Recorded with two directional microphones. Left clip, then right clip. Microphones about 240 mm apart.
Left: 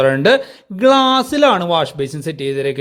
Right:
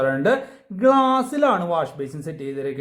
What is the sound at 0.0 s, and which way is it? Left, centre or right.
Speech, left.